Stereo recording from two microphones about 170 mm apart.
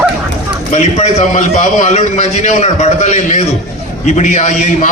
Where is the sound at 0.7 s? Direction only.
45° left (ahead or behind).